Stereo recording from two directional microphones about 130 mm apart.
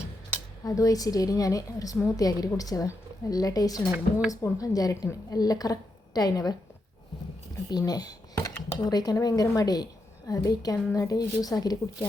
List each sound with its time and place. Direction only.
0.6 s a woman's voice: 25° left (ahead or behind)
7.7 s a woman's voice: 30° left (ahead or behind)